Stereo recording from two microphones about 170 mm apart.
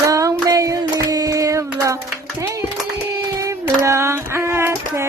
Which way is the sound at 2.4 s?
15° right (ahead or behind).